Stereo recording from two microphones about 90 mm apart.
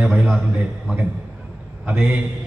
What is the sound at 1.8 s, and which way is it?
Speech, 15° right (ahead or behind).